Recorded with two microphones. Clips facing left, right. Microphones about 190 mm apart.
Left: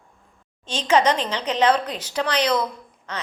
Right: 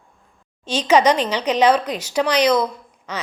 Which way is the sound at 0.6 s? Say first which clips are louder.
Right 4 dB; 10° right (ahead or behind).